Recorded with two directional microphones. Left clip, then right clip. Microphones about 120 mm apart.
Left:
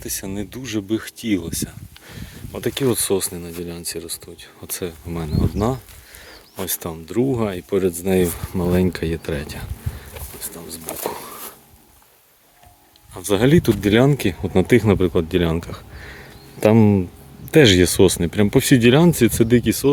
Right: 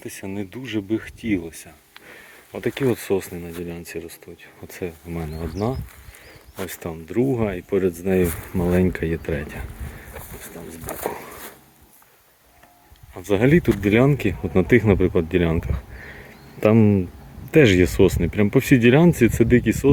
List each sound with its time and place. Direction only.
0.3 s speech: 40° left (ahead or behind); by 1.5 s 55° left (ahead or behind)
2.5 s speech: 35° left (ahead or behind)
6.7 s speech: 45° left (ahead or behind)
6.9 s speech: 30° left (ahead or behind)
8.3 s speech: 20° left (ahead or behind)
10.1 s a sound: 15° left (ahead or behind)
13.1 s speech: 35° left (ahead or behind)
16.0 s a sound: 20° left (ahead or behind)
16.6 s speech: 30° left (ahead or behind)
17.5 s speech: 40° left (ahead or behind)